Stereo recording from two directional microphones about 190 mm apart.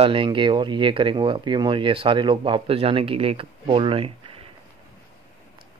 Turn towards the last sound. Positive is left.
turn(degrees=-30)  # may be behind; listen again after turning